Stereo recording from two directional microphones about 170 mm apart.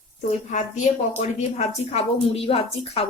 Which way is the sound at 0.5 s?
45° left (ahead or behind).